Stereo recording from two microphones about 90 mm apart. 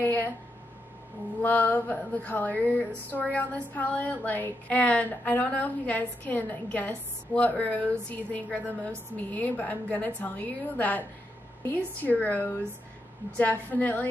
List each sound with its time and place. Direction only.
0.0 s speech: 20° left (ahead or behind)
1.4 s a woman's voice: 20° left (ahead or behind)